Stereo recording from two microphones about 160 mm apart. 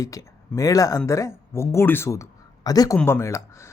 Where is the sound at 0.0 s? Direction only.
20° left (ahead or behind).